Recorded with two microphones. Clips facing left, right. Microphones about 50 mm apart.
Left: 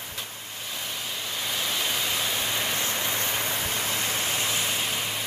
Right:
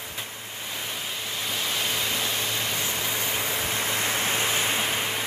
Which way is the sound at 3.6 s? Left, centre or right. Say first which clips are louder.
Right 2 dB; right.